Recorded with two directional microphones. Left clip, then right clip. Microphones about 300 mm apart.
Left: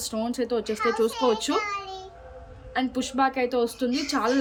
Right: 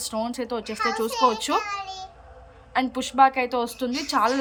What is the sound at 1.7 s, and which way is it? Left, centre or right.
Speech, right.